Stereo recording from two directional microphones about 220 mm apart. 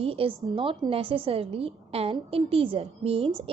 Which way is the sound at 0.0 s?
25° right (ahead or behind).